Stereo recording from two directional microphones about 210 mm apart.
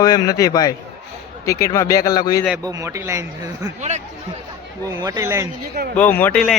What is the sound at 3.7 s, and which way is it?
Speech, 35° right (ahead or behind).